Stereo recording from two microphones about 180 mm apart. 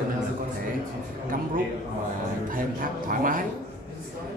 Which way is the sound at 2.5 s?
50° right (ahead or behind).